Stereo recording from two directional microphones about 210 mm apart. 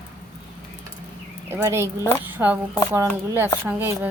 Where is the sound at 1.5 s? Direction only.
10° right (ahead or behind).